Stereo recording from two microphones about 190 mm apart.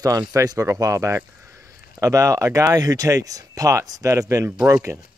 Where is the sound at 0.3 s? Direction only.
15° right (ahead or behind).